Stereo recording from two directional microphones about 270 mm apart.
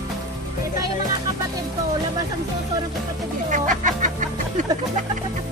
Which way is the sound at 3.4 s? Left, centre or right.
Right.